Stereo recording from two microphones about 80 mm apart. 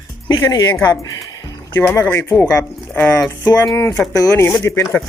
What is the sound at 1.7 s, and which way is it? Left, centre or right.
Speech, left.